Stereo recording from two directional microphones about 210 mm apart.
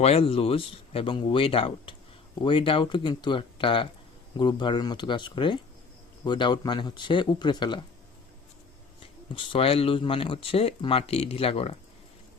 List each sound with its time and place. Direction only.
0.0 s speech: 30° left (ahead or behind)
9.3 s speech: 25° left (ahead or behind)